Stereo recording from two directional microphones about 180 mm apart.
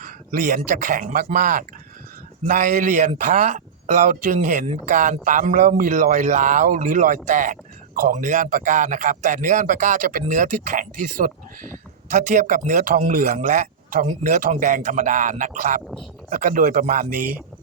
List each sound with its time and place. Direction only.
0.0 s speech: 45° right (ahead or behind)